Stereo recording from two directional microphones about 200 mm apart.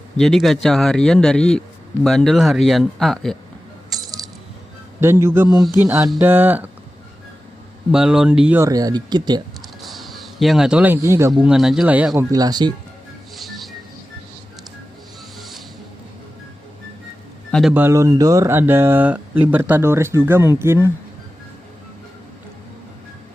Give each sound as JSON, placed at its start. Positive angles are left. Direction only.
{"t": 0.2, "sound": "speech", "side_deg": 0}
{"t": 3.8, "sound": "rattle", "side_deg": 0}
{"t": 4.9, "sound": "speech", "side_deg": -10}
{"t": 7.9, "sound": "speech", "side_deg": -5}
{"t": 9.8, "sound": "speech", "side_deg": 0}
{"t": 11.4, "sound": "speech", "side_deg": 0}
{"t": 12.3, "sound": "speech", "side_deg": -20}
{"t": 13.3, "sound": "music", "side_deg": 0}
{"t": 15.4, "sound": "music", "side_deg": 0}
{"t": 17.5, "sound": "speech", "side_deg": 0}